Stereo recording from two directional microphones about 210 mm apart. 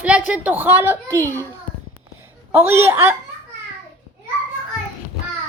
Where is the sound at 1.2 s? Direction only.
10° left (ahead or behind).